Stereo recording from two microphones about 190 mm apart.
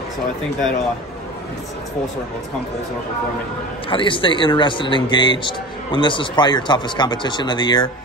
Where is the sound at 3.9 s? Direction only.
25° left (ahead or behind).